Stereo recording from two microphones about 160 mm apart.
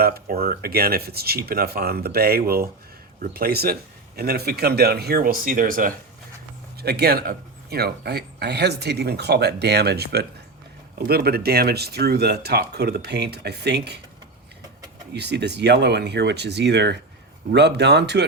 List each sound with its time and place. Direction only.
0.0 s speech: 70° right (ahead or behind)
6.7 s speech: 80° right
15.1 s speech: 90° right